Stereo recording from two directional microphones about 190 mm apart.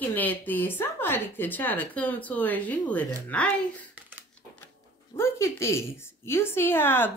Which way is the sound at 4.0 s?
10° right (ahead or behind).